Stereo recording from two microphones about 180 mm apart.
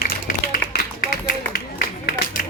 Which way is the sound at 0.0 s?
55° left (ahead or behind).